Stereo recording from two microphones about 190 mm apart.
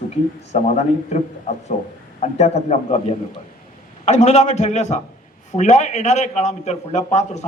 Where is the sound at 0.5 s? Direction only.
35° left (ahead or behind).